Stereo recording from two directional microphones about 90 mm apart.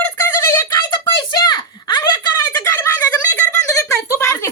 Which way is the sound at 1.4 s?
55° left (ahead or behind).